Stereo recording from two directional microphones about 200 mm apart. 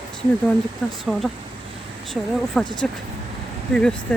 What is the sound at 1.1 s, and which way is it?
Speech, centre (ahead or behind).